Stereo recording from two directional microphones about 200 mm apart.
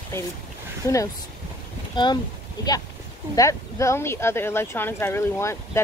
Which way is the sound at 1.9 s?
20° left (ahead or behind).